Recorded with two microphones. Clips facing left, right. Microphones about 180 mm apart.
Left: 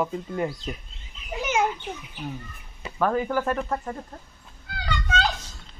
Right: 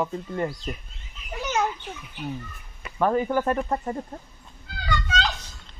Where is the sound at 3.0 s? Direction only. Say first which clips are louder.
Right 1 dB; 5° right (ahead or behind).